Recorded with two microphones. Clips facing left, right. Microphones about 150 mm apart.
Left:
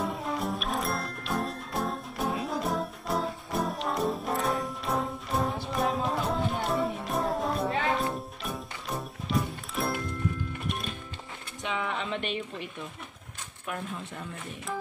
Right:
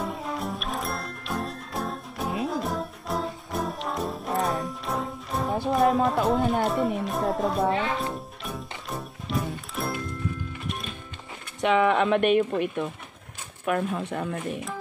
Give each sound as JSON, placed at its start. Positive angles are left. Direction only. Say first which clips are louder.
{"t": 0.0, "sound": "music", "louder": "even", "side_deg": 0}
{"t": 11.6, "sound": "speech", "louder": "right 12 dB", "side_deg": -65}
{"t": 13.7, "sound": "speech", "louder": "right 10 dB", "side_deg": -75}